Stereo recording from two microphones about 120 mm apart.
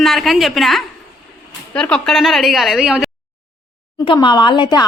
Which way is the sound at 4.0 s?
40° left (ahead or behind).